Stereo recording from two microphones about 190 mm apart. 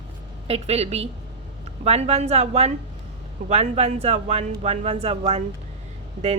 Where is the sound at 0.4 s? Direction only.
30° right (ahead or behind).